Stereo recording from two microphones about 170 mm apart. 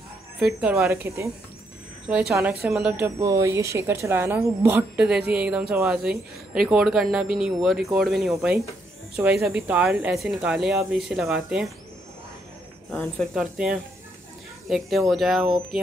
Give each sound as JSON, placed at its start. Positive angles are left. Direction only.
{"t": 0.6, "sound": "speech", "side_deg": -5}
{"t": 0.8, "sound": "speech", "side_deg": -15}
{"t": 2.6, "sound": "speech", "side_deg": 0}
{"t": 3.0, "sound": "speech", "side_deg": -15}
{"t": 12.9, "sound": "speech", "side_deg": 0}